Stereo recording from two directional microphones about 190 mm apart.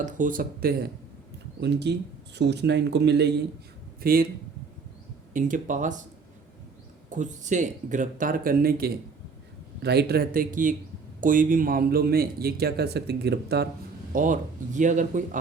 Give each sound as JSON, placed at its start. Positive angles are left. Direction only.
{"t": 0.0, "sound": "a man's voice", "side_deg": -45}
{"t": 4.0, "sound": "a man's voice", "side_deg": -50}
{"t": 5.3, "sound": "a man's voice", "side_deg": -45}
{"t": 7.1, "sound": "a man's voice", "side_deg": -40}
{"t": 14.1, "sound": "speech", "side_deg": -45}